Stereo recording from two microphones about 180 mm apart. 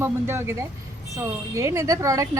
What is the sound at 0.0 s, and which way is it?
Speech, 15° right (ahead or behind).